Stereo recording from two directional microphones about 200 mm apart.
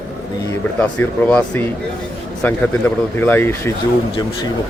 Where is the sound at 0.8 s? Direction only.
10° left (ahead or behind).